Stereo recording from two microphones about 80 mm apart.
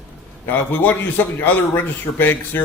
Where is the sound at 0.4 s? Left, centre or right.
Left.